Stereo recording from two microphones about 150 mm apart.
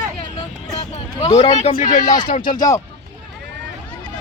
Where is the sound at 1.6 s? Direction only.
50° left (ahead or behind).